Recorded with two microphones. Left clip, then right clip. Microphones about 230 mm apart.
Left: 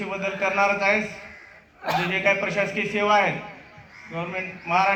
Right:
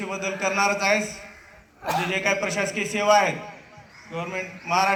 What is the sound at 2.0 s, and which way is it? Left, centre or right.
A man's voice, right.